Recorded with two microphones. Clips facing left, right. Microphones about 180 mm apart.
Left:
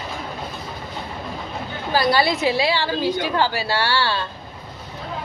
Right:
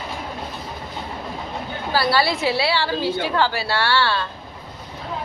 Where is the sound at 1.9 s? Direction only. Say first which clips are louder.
Left 1 dB; 15° left (ahead or behind).